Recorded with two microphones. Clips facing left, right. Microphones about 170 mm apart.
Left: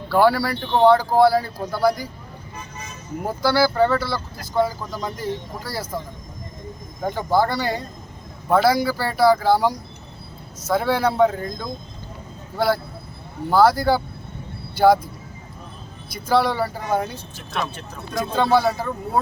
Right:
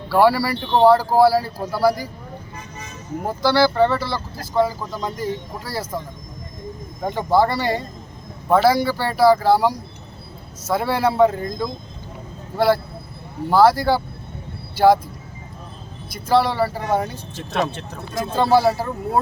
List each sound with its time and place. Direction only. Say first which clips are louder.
0.1 s speech: right 1 dB; 5° right (ahead or behind)
3.2 s speech: right 2 dB; centre (ahead or behind)
7.0 s speech: right 2 dB; centre (ahead or behind)
16.0 s speech: right 1 dB; centre (ahead or behind)
17.5 s speech: right 5 dB; 35° right (ahead or behind)
18.1 s speech: right 2 dB; 5° right (ahead or behind)